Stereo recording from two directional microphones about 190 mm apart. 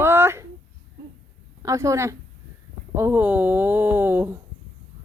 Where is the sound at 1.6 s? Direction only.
15° right (ahead or behind).